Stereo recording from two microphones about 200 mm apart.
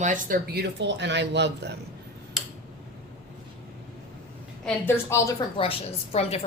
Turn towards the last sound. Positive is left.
turn(degrees=30)  # may be behind; listen again after turning